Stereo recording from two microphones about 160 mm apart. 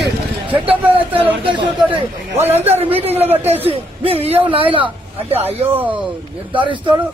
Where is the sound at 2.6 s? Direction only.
40° right (ahead or behind).